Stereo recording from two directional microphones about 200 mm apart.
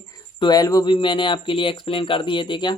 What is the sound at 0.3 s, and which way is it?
Speech, 20° left (ahead or behind).